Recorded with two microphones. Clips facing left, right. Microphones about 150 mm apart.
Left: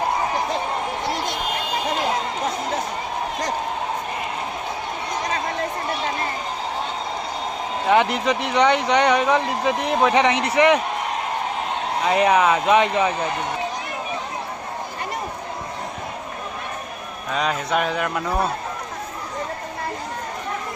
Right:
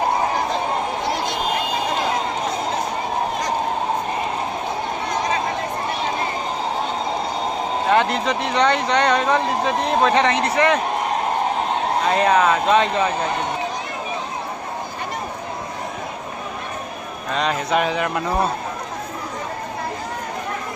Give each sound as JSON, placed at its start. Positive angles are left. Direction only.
{"t": 8.1, "sound": "speech", "side_deg": 15}
{"t": 12.0, "sound": "speech", "side_deg": 15}
{"t": 17.3, "sound": "a man's voice", "side_deg": 5}